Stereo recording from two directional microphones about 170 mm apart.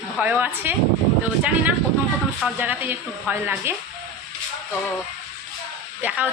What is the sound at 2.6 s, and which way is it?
Speech, 10° right (ahead or behind).